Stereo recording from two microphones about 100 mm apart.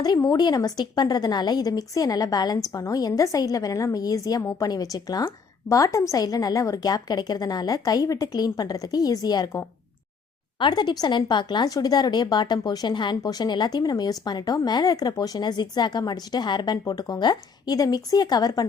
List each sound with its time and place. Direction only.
0.0 s a woman's voice: 40° left (ahead or behind)
10.6 s a woman's voice: 50° left (ahead or behind)